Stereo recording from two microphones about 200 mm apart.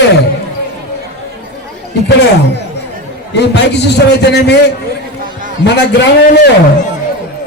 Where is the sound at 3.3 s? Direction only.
55° left (ahead or behind).